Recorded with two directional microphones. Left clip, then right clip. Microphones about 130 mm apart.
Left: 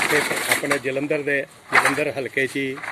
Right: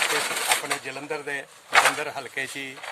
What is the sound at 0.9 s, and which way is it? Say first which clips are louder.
Speech: left 9 dB; 40° right (ahead or behind).